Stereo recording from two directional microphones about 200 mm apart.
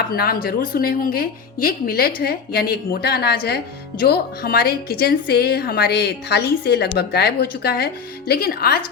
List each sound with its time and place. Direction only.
0.1 s speech: 50° left (ahead or behind)